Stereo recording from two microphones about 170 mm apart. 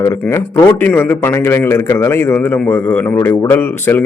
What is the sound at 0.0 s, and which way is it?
A man's voice, 15° left (ahead or behind).